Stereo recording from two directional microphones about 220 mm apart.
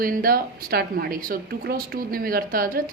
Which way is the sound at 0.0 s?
40° right (ahead or behind).